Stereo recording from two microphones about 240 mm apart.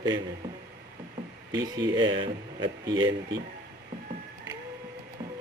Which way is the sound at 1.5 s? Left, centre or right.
Centre.